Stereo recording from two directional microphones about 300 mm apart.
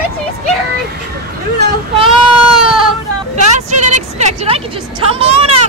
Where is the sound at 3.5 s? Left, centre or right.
Right.